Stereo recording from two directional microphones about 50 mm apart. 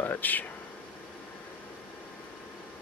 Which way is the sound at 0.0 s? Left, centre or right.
Left.